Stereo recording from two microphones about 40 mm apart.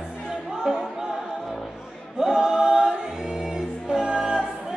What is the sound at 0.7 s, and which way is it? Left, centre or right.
Music, centre.